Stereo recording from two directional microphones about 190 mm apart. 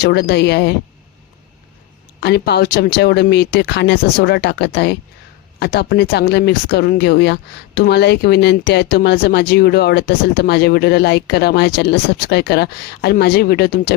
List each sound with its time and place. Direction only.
0.0 s speech: 60° left (ahead or behind)
2.2 s speech: 60° left (ahead or behind)